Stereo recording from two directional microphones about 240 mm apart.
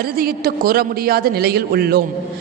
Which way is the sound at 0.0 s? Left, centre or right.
Right.